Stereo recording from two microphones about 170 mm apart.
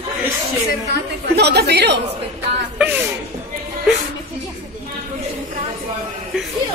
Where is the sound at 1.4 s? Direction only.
75° right (ahead or behind).